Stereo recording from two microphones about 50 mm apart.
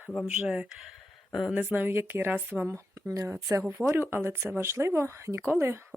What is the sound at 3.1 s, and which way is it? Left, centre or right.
Speech, right.